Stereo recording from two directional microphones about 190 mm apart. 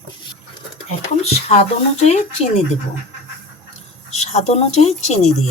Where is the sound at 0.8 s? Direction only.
35° left (ahead or behind).